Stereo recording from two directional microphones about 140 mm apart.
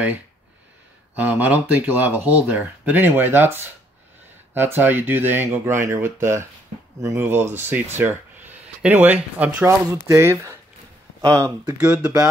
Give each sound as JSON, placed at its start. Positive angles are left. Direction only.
{"t": 1.1, "sound": "speech", "side_deg": -10}
{"t": 11.8, "sound": "speech", "side_deg": -10}